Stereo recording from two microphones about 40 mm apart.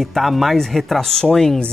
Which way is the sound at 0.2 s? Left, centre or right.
Centre.